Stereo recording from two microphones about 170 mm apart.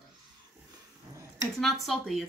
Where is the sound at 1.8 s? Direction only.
Centre (ahead or behind).